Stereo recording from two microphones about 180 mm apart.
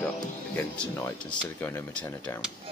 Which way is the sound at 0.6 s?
10° left (ahead or behind).